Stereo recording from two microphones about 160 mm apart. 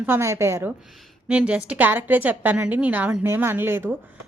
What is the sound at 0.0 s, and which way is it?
A woman's voice, 15° right (ahead or behind).